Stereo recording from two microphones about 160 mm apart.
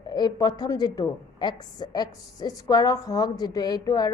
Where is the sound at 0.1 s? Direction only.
25° left (ahead or behind).